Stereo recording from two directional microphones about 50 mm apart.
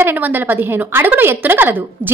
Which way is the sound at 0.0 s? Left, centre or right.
Right.